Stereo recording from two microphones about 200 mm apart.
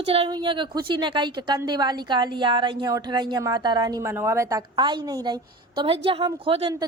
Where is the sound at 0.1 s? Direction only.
25° right (ahead or behind).